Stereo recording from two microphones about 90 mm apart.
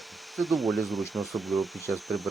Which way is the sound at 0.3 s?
Centre (ahead or behind).